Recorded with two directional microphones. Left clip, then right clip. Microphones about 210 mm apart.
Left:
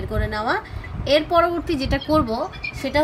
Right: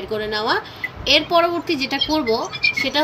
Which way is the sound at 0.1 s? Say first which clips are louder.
Right 3 dB; 30° left (ahead or behind).